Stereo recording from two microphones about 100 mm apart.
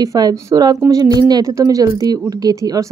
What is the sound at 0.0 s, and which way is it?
A woman's voice, 35° right (ahead or behind).